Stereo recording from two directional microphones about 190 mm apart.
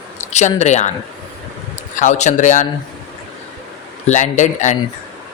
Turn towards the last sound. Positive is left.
turn(degrees=40)  # may be behind; listen again after turning